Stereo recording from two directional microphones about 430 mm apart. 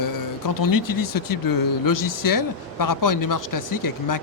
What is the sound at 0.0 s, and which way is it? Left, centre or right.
Speech, left.